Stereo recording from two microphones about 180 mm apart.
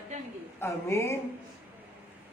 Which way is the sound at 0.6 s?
15° left (ahead or behind).